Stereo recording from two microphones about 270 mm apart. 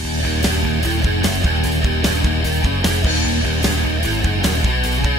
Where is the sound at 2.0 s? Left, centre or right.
Centre.